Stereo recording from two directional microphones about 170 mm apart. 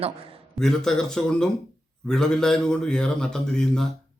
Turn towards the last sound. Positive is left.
turn(degrees=5)  # may be behind; listen again after turning